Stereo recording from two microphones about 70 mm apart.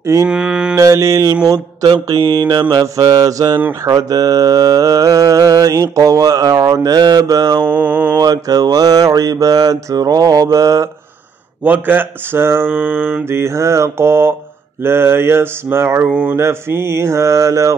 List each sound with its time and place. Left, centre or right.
0.0 s mantra: right
0.3 s mantra: centre
0.7 s mantra: right
2.3 s mantra: right
2.7 s mantra: right
7.6 s speech: right
8.2 s mantra: right
11.6 s speech: right
13.3 s mantra: right